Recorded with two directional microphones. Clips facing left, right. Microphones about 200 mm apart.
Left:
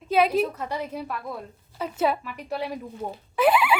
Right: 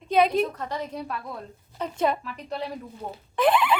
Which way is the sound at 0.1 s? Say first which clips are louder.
Even; 5° left (ahead or behind).